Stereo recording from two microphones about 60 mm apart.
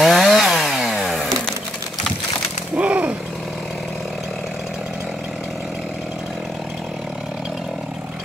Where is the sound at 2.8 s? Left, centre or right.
Right.